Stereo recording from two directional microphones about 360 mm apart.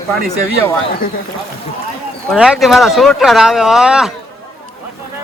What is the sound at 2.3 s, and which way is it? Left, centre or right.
Speech, centre.